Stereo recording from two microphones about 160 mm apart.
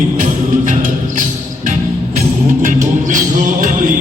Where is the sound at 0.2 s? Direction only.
55° right (ahead or behind).